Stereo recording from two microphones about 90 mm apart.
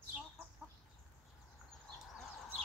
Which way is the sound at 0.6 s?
15° right (ahead or behind).